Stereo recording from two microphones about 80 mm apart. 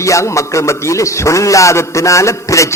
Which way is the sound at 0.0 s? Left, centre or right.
Left.